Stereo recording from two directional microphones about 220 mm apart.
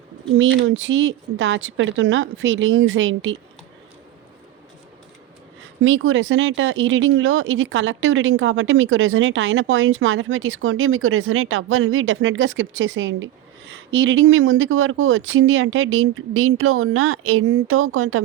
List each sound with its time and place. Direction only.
0.3 s speech: 60° right (ahead or behind)
5.8 s speech: 60° right (ahead or behind)